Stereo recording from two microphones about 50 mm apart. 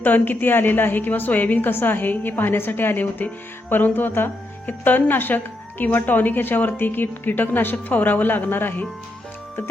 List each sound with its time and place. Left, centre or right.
0.0 s speech: left
3.7 s music: left
4.6 s speech: left